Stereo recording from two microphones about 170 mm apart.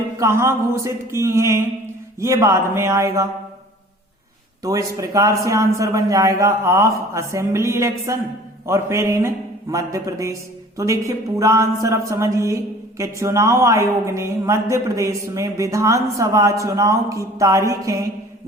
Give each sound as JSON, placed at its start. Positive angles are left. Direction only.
{"t": 0.2, "sound": "speech", "side_deg": -15}
{"t": 4.6, "sound": "a man's voice", "side_deg": -20}